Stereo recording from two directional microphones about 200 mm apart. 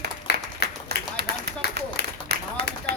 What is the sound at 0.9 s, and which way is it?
Run, 55° right (ahead or behind).